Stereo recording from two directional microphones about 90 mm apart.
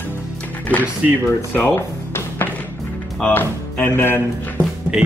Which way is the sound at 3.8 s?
25° left (ahead or behind).